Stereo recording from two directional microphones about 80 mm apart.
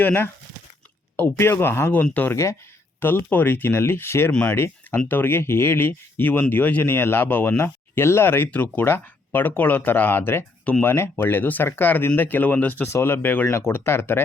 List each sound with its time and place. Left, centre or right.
0.0 s speech: left
4.3 s speech: centre
4.5 s speech: left
12.9 s speech: left